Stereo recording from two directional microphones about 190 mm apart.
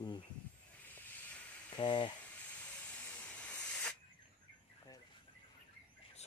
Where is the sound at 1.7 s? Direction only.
25° left (ahead or behind).